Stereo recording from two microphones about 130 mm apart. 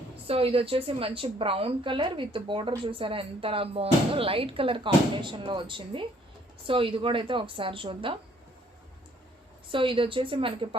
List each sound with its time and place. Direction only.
0.3 s a woman's voice: 50° right (ahead or behind)
9.6 s a woman's voice: 40° right (ahead or behind)